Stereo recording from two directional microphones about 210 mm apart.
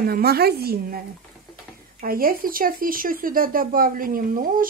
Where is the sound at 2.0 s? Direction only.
45° right (ahead or behind).